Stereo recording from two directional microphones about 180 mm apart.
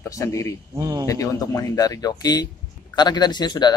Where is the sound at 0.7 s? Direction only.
20° right (ahead or behind).